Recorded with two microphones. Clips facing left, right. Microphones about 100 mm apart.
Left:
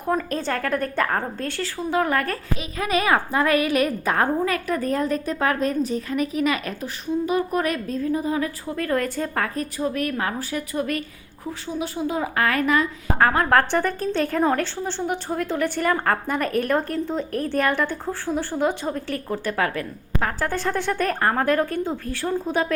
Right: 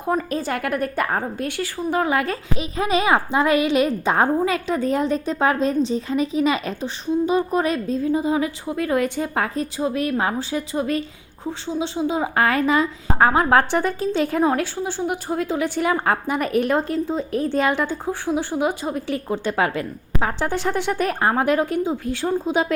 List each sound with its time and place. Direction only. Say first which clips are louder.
0.1 s a woman's voice: right 1 dB; 10° right (ahead or behind)
2.6 s a woman's voice: right 3 dB; 25° right (ahead or behind)
9.6 s a woman's voice: right 2 dB; 30° right (ahead or behind)
13.2 s a woman's voice: right 2 dB; 15° right (ahead or behind)